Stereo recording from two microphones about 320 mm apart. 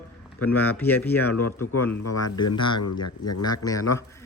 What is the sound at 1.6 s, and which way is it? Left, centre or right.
Speech, left.